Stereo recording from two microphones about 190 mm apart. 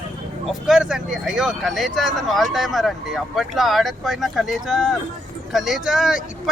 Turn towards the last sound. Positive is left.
turn(degrees=0)  # may be behind; listen again after turning